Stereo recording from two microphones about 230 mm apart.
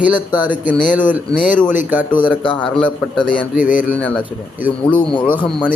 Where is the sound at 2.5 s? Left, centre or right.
Centre.